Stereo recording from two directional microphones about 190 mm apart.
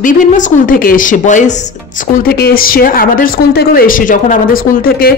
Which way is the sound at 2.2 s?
50° left (ahead or behind).